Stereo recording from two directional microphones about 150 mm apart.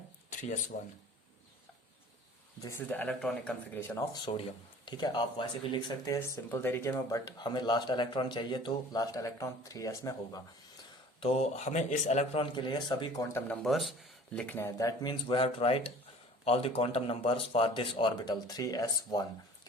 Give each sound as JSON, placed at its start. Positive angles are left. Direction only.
{"t": 0.3, "sound": "a sound", "side_deg": 60}
{"t": 2.6, "sound": "speech", "side_deg": 20}
{"t": 4.1, "sound": "speech", "side_deg": 30}
{"t": 6.1, "sound": "speech", "side_deg": 15}
{"t": 11.2, "sound": "speech", "side_deg": 40}
{"t": 13.6, "sound": "a man's voice", "side_deg": 0}
{"t": 14.3, "sound": "speech", "side_deg": 10}
{"t": 15.3, "sound": "speech", "side_deg": 40}